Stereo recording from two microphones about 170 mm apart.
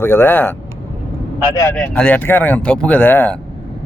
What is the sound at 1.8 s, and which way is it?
Speech, 5° left (ahead or behind).